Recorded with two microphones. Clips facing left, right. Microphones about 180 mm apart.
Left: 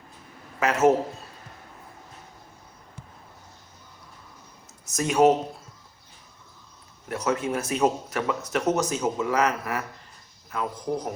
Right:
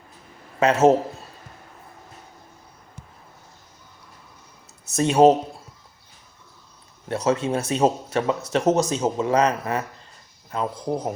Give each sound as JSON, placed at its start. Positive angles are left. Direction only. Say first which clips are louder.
{"t": 0.6, "sound": "speech", "louder": "right 4 dB", "side_deg": -30}
{"t": 4.9, "sound": "speech", "louder": "right 4 dB", "side_deg": -30}
{"t": 7.1, "sound": "speech", "louder": "right 4 dB", "side_deg": -25}